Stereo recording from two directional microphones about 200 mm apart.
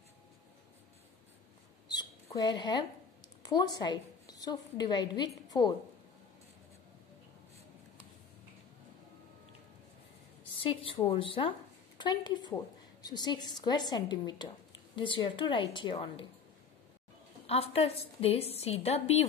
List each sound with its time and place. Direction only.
1.9 s mouse: 20° left (ahead or behind)
3.4 s a woman's voice: 20° left (ahead or behind)
10.5 s a woman's voice: 25° left (ahead or behind)
17.5 s a woman's voice: 30° left (ahead or behind)